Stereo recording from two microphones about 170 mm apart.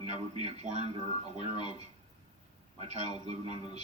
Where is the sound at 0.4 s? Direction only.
40° right (ahead or behind).